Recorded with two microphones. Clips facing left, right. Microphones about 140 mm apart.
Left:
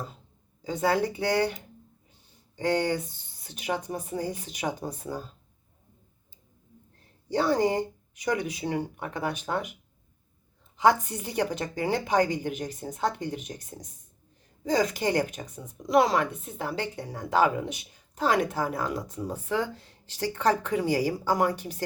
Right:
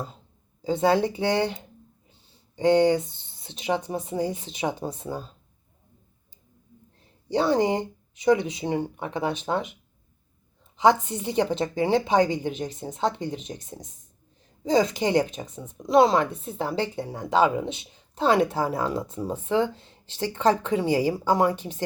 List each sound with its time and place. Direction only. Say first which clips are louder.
0.6 s a woman's voice: right 4 dB; 25° right (ahead or behind)
7.3 s a woman's voice: right 2 dB; 20° right (ahead or behind)
10.8 s a woman's voice: right 2 dB; 20° right (ahead or behind)